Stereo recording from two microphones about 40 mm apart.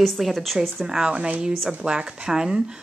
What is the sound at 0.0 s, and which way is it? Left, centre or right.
Speech, centre.